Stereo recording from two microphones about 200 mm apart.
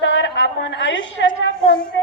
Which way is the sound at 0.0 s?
70° left (ahead or behind).